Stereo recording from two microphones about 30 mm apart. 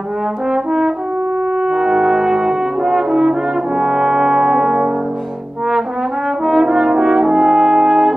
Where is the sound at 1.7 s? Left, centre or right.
Centre.